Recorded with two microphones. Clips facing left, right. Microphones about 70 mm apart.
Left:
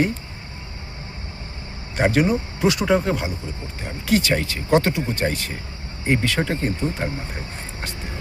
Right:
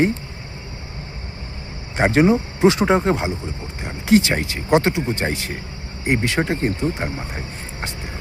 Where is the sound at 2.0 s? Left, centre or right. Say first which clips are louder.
Right 3 dB; right.